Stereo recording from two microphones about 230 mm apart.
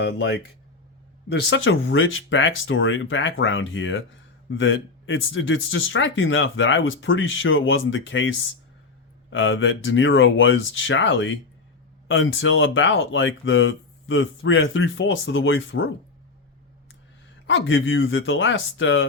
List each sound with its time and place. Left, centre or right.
0.0 s speech: left
17.4 s speech: left